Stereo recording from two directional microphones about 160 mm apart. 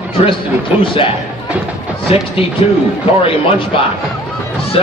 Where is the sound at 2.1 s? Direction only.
35° left (ahead or behind).